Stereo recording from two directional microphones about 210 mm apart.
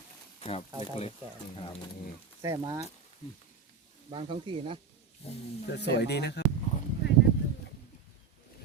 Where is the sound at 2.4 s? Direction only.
15° right (ahead or behind).